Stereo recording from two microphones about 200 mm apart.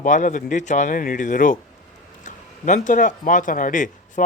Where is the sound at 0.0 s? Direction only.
40° left (ahead or behind).